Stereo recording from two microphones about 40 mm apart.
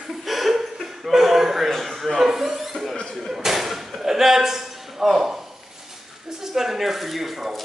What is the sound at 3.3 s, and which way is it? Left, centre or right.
Whip, centre.